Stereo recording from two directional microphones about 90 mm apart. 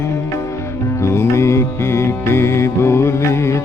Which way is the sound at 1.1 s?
30° left (ahead or behind).